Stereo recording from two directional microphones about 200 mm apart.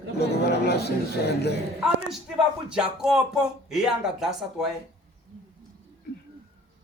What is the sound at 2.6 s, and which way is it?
Speech, 5° right (ahead or behind).